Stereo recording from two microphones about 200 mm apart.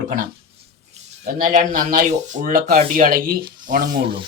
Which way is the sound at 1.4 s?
45° right (ahead or behind).